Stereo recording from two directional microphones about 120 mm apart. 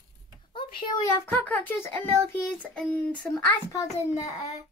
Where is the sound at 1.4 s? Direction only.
15° left (ahead or behind).